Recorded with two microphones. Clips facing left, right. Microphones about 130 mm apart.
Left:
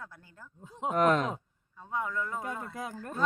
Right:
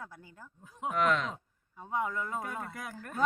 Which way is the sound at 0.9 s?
40° left (ahead or behind).